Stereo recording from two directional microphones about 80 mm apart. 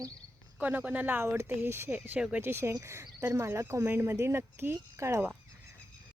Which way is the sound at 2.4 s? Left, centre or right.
Right.